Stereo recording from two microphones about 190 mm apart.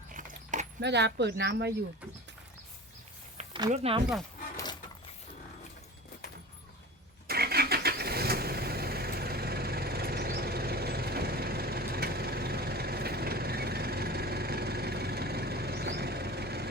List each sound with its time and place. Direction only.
0.1 s keys jangling: 40° right (ahead or behind)
0.8 s speech: 65° right (ahead or behind)
3.3 s a sound: 25° right (ahead or behind)
3.7 s speech: 30° right (ahead or behind)
4.5 s keys jangling: 20° left (ahead or behind)
7.3 s vehicle: 55° right (ahead or behind)